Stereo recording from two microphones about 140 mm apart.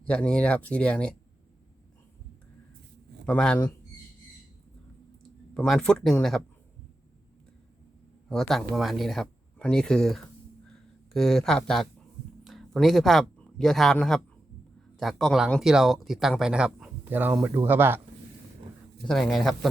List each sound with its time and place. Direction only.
0.0 s speech: 10° left (ahead or behind)
3.2 s speech: 10° left (ahead or behind)
5.5 s speech: 5° left (ahead or behind)
8.3 s speech: 5° left (ahead or behind)
10.7 s a sound: 5° left (ahead or behind)
12.5 s speech: centre (ahead or behind); by 18.0 s 15° right (ahead or behind)
19.0 s speech: centre (ahead or behind)